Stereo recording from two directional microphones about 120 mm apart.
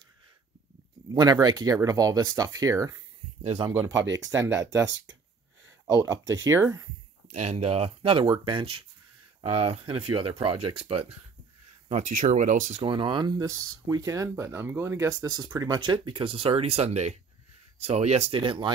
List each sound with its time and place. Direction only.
1.0 s speech: 35° right (ahead or behind)
4.3 s speech: 25° right (ahead or behind)
7.3 s speech: 65° right (ahead or behind); by 8.8 s 45° right (ahead or behind)
9.4 s speech: 60° right (ahead or behind)
11.9 s speech: 90° right
12.8 s speech: 45° right (ahead or behind); by 18.4 s 65° right (ahead or behind)
18.4 s speech: 45° right (ahead or behind)